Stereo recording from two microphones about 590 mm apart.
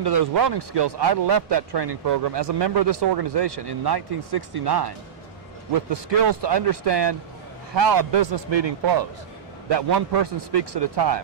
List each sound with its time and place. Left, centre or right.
0.0 s speech: right
5.9 s a man's voice: right